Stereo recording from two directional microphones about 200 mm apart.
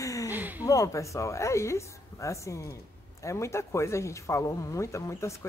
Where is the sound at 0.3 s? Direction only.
10° right (ahead or behind).